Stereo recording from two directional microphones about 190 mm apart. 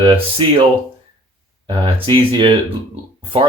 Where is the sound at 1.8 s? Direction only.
25° right (ahead or behind).